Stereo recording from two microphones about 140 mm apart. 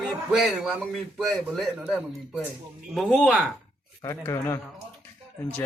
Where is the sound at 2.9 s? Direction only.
Centre (ahead or behind).